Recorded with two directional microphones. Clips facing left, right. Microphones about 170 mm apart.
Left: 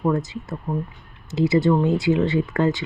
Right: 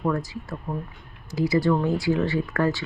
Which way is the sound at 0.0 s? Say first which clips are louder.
Left 4 dB; 20° left (ahead or behind).